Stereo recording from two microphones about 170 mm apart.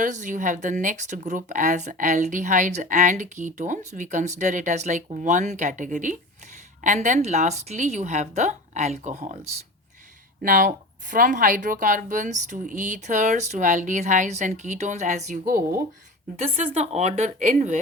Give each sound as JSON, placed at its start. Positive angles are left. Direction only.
{"t": 0.0, "sound": "speech", "side_deg": -45}
{"t": 10.4, "sound": "speech", "side_deg": -50}
{"t": 15.4, "sound": "speech", "side_deg": -60}
{"t": 16.4, "sound": "speech", "side_deg": -35}